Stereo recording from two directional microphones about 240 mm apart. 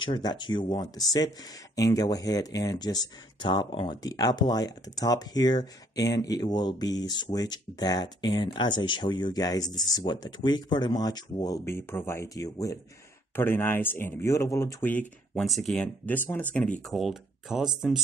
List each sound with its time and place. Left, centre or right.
0.0 s speech: centre